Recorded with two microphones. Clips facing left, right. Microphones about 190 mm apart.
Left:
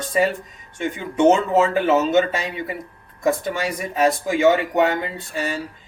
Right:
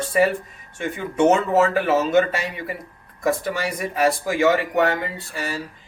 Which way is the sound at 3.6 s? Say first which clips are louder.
Left 1 dB; 20° left (ahead or behind).